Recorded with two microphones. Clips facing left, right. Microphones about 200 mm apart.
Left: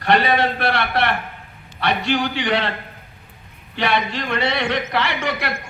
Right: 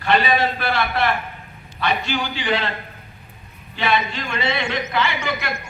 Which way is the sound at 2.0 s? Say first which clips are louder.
Left 4 dB; 65° left (ahead or behind).